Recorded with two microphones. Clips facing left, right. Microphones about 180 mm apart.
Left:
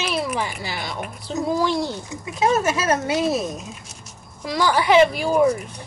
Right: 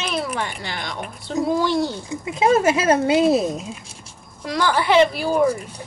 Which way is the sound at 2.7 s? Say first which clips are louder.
Right 4 dB; 25° right (ahead or behind).